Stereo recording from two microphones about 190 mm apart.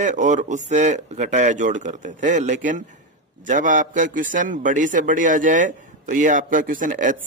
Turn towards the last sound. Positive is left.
turn(degrees=-45)  # may be behind; listen again after turning